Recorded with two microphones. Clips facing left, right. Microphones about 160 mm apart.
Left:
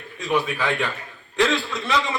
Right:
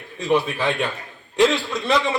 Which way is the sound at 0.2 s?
25° right (ahead or behind).